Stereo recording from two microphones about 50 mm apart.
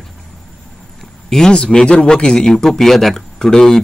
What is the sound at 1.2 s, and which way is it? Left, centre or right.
A man's voice, centre.